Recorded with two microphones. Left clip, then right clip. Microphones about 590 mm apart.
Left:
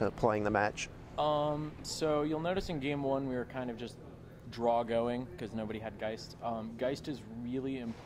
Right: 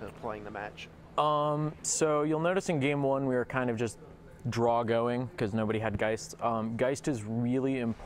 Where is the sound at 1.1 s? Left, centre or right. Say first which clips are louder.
Right 4 dB; right.